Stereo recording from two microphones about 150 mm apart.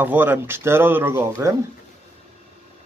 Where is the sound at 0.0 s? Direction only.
10° right (ahead or behind).